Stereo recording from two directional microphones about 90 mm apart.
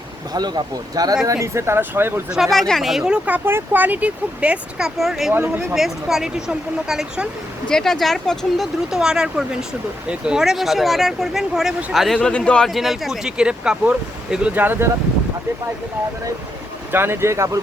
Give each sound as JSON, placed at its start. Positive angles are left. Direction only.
{"t": 0.3, "sound": "speech", "side_deg": -50}
{"t": 1.3, "sound": "speech", "side_deg": -35}
{"t": 2.3, "sound": "speech", "side_deg": 0}
{"t": 4.9, "sound": "speech", "side_deg": 0}
{"t": 5.3, "sound": "speech", "side_deg": -25}
{"t": 5.7, "sound": "speech", "side_deg": -5}
{"t": 7.7, "sound": "speech", "side_deg": 5}
{"t": 12.1, "sound": "speech", "side_deg": 10}
{"t": 16.9, "sound": "speech", "side_deg": -25}